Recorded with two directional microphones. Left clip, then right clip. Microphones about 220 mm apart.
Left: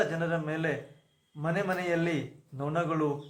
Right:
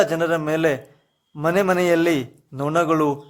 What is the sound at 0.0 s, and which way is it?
A man's voice, 50° right (ahead or behind).